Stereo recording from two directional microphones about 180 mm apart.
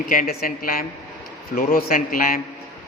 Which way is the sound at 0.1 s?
50° left (ahead or behind).